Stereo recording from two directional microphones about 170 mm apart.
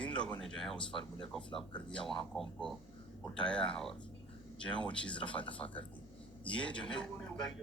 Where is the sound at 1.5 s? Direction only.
30° left (ahead or behind).